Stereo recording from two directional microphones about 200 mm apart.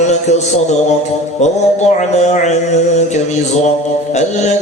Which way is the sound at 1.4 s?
35° left (ahead or behind).